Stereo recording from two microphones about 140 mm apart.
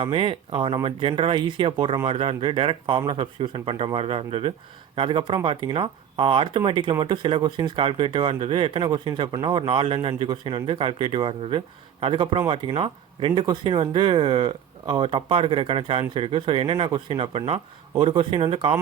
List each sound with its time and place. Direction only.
0.0 s speech: 40° right (ahead or behind)